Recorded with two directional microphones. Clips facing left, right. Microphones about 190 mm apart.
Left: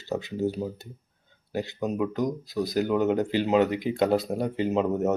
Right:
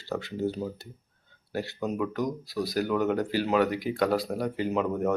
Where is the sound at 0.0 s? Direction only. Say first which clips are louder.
Left 2 dB; 20° left (ahead or behind).